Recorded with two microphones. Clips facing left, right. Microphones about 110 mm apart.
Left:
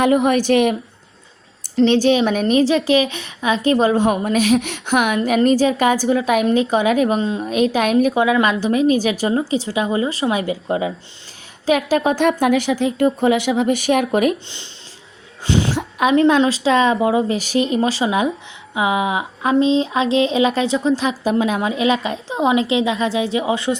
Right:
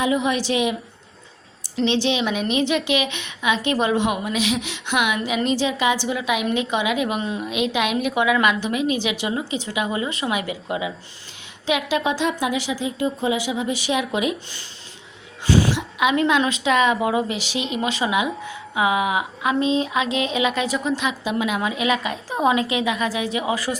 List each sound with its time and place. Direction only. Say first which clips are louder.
0.0 s a woman's voice: left 6 dB; 55° left (ahead or behind); by 7.5 s 30° left (ahead or behind)
7.5 s a woman's voice: left 7 dB; 40° left (ahead or behind)
15.4 s a sound: even; 25° left (ahead or behind)
15.7 s a woman's voice: left 4 dB; 40° left (ahead or behind)
17.3 s a woman's voice: left 8 dB; 45° left (ahead or behind)
18.4 s a sound: left 1 dB; 25° left (ahead or behind)